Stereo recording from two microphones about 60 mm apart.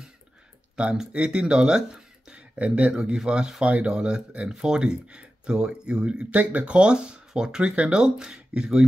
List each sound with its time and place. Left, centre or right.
0.8 s speech: centre